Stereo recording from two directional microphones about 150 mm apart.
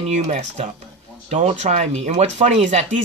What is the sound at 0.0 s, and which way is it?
Speech, 50° right (ahead or behind).